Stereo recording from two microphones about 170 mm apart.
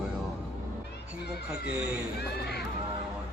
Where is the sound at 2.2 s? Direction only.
70° left (ahead or behind).